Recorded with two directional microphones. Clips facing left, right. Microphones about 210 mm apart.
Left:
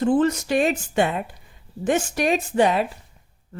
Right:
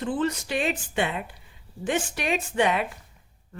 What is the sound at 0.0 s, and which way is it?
A woman's voice, 45° left (ahead or behind).